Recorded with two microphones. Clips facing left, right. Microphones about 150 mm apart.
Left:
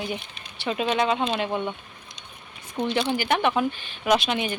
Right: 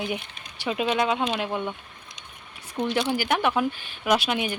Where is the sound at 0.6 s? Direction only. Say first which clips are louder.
Left 1 dB; 5° right (ahead or behind).